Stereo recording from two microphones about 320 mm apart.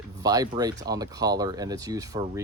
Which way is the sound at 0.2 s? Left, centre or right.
Centre.